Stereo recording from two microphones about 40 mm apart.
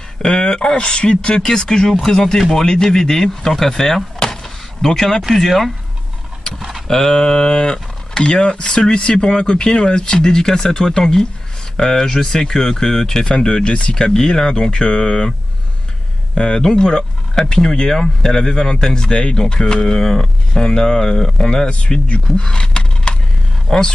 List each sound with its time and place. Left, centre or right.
0.2 s speech: centre
6.9 s speech: centre
16.3 s speech: left
21.6 s speech: left
22.3 s a sound: left
23.7 s speech: centre